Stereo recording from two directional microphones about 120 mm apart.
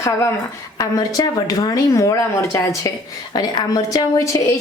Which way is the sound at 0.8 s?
30° left (ahead or behind).